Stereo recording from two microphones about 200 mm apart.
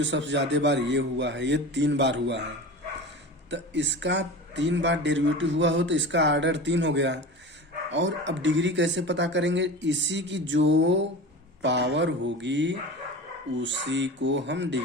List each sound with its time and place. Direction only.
0.0 s speech: 65° right (ahead or behind)
3.5 s speech: 60° right (ahead or behind)